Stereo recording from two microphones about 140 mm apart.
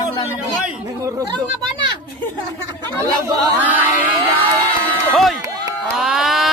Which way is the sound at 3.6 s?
10° right (ahead or behind).